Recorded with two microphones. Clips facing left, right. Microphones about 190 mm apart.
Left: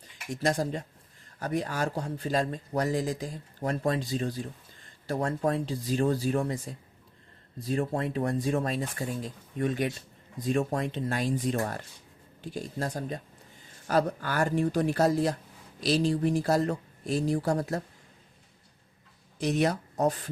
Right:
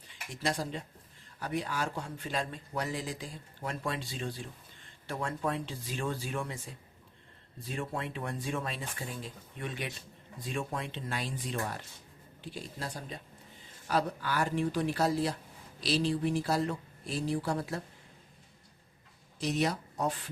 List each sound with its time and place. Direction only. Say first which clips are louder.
0.4 s speech: left 6 dB; 45° left (ahead or behind)
7.6 s speech: left 8 dB; 40° left (ahead or behind)
19.4 s speech: left 5 dB; 55° left (ahead or behind)